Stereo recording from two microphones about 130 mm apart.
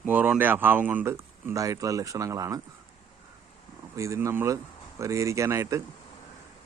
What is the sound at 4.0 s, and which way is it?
Speech, 25° right (ahead or behind).